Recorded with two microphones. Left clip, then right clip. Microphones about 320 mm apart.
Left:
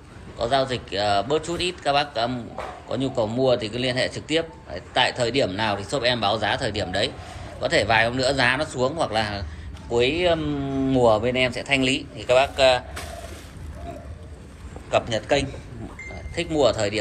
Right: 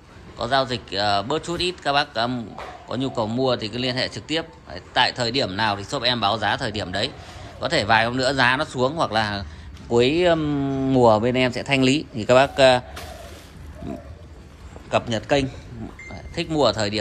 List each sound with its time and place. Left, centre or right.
0.4 s a man's voice: centre
9.9 s a man's voice: right
10.7 s a man's voice: right
14.9 s a man's voice: centre
16.5 s a man's voice: centre